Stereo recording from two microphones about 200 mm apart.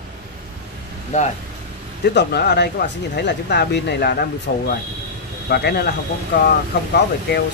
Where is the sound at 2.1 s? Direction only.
55° left (ahead or behind).